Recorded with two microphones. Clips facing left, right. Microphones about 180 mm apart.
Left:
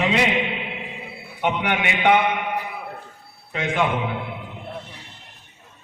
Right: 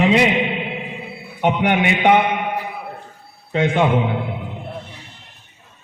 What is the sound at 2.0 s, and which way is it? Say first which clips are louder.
Mantra: right 1 dB; 20° right (ahead or behind).